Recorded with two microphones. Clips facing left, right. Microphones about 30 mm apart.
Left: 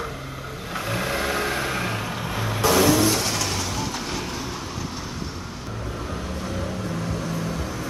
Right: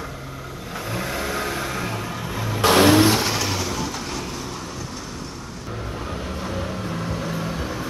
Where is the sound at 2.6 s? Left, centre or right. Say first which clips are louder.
Right 4 dB; right.